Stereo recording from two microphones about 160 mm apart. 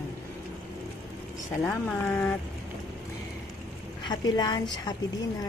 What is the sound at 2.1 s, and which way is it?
Speech, 15° left (ahead or behind).